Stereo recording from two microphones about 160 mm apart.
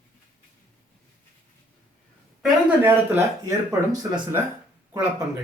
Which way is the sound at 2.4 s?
10° right (ahead or behind).